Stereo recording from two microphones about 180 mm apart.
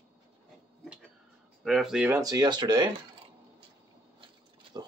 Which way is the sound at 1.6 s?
Centre (ahead or behind).